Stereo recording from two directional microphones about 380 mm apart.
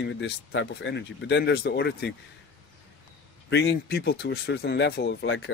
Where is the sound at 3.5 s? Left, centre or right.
Left.